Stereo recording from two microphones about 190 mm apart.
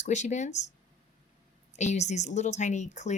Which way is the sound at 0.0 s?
40° left (ahead or behind).